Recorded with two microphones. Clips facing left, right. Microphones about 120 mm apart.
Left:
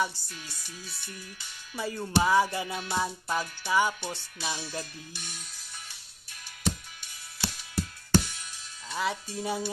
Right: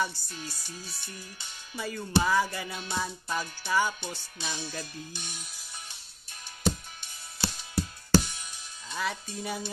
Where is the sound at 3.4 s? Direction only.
25° right (ahead or behind).